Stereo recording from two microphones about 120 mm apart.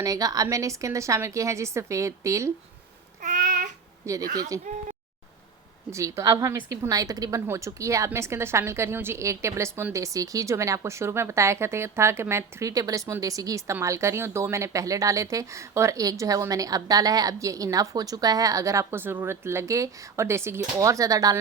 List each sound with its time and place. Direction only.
0.0 s speech: 30° right (ahead or behind)
3.2 s babbling: 90° right
4.0 s speech: 30° right (ahead or behind)
5.9 s speech: 25° right (ahead or behind)